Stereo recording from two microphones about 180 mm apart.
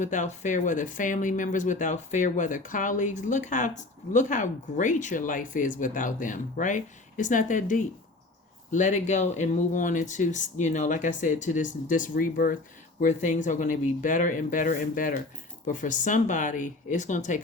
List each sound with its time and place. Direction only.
0.0 s speech: 45° left (ahead or behind)